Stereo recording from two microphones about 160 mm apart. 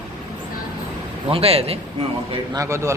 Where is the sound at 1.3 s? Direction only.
40° right (ahead or behind).